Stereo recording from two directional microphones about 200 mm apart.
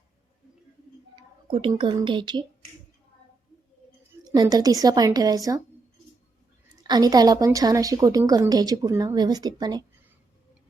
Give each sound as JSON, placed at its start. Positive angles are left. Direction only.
{"t": 1.1, "sound": "speech", "side_deg": -25}
{"t": 4.2, "sound": "a woman's voice", "side_deg": -20}
{"t": 6.8, "sound": "a woman's voice", "side_deg": -20}